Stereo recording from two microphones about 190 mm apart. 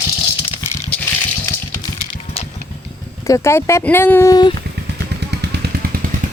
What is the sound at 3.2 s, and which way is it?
Speech, 15° left (ahead or behind).